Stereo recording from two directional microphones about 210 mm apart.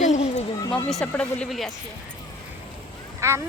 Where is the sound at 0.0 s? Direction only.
35° left (ahead or behind).